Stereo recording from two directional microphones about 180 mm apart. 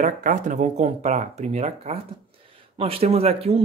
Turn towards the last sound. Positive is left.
turn(degrees=-35)  # may be behind; listen again after turning